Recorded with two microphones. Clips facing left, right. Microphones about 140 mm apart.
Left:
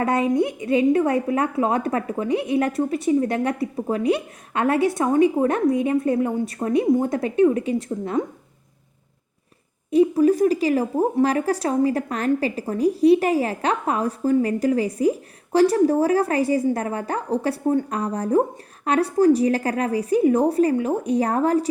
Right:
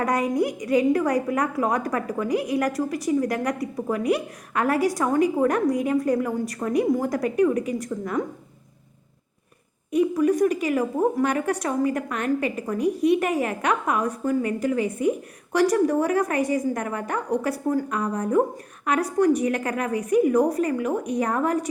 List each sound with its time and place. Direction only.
0.0 s a woman's voice: 25° left (ahead or behind)
9.9 s a woman's voice: 30° left (ahead or behind)